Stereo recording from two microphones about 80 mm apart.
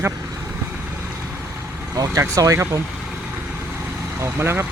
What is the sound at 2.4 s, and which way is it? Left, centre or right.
Speech, right.